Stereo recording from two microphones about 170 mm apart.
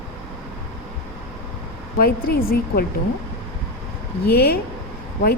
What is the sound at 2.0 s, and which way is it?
Speech, 60° left (ahead or behind).